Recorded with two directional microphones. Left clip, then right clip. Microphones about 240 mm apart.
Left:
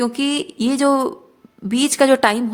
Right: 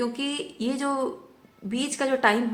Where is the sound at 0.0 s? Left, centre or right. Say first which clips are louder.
Left 8 dB; left.